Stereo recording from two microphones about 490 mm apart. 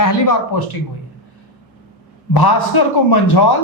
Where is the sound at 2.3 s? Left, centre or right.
Left.